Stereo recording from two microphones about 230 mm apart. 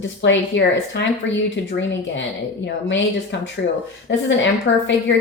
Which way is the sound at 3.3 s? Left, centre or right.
Left.